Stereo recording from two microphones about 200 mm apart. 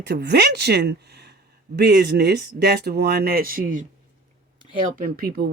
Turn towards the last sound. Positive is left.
turn(degrees=-50)  # may be behind; listen again after turning